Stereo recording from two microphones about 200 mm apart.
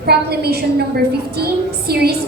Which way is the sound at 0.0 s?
55° right (ahead or behind).